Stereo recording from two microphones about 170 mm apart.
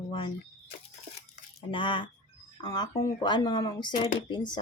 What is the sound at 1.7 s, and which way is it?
Speech, 30° left (ahead or behind).